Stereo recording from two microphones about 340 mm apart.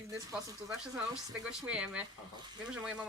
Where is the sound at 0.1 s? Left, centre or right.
Centre.